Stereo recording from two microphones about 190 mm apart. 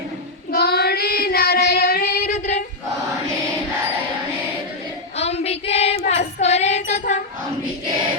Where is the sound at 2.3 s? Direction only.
35° left (ahead or behind).